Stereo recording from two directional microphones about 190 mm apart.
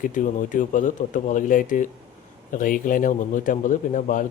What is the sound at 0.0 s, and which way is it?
A man's voice, 45° left (ahead or behind).